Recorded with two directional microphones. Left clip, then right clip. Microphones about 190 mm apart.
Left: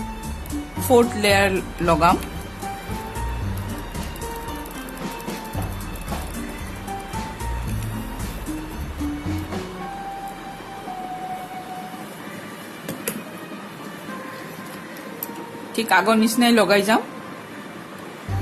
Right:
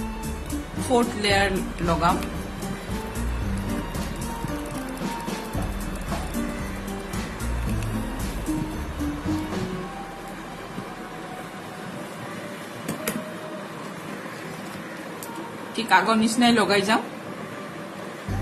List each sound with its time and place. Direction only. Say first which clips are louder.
0.8 s speech: left 6 dB; 45° left (ahead or behind)
5.0 s music: even; centre (ahead or behind)
15.7 s a woman's voice: left 2 dB; 45° left (ahead or behind)